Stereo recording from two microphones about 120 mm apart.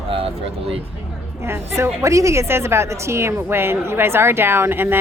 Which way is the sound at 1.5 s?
20° right (ahead or behind).